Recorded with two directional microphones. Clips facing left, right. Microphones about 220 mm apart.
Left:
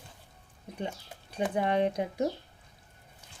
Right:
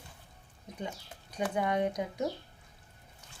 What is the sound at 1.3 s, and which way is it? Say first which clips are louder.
Speech: left 3 dB; 30° left (ahead or behind).